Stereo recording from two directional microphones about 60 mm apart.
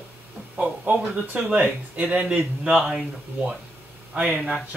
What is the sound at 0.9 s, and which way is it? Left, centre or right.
Speech, right.